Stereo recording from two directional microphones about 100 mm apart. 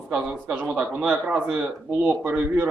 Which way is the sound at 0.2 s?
15° right (ahead or behind).